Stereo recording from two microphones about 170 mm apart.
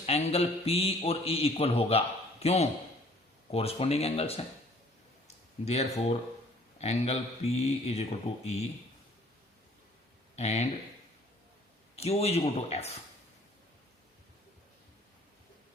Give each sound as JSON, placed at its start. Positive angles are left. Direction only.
{"t": 0.0, "sound": "a man's voice", "side_deg": 35}
{"t": 5.6, "sound": "a man's voice", "side_deg": 40}
{"t": 10.3, "sound": "speech", "side_deg": 40}
{"t": 11.9, "sound": "a man's voice", "side_deg": 35}